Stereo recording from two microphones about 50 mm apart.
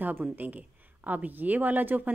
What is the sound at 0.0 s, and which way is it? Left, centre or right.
Speech, right.